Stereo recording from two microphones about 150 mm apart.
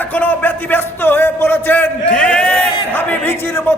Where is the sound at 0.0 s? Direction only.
10° left (ahead or behind).